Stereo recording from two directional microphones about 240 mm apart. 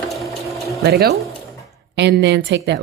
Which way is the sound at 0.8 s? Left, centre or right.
Right.